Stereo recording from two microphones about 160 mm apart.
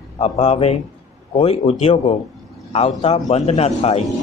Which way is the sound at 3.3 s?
40° left (ahead or behind).